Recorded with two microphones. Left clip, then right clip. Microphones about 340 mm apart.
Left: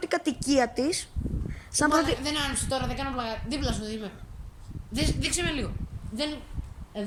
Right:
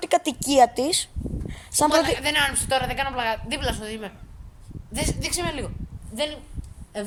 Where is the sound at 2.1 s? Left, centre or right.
Right.